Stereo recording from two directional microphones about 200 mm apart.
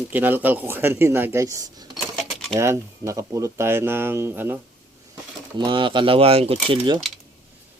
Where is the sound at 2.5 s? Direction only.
15° right (ahead or behind).